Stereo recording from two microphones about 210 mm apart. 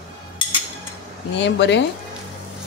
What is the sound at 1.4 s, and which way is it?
Speech, 60° left (ahead or behind).